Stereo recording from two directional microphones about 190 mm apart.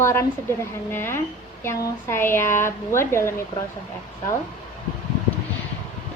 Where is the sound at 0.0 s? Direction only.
15° left (ahead or behind).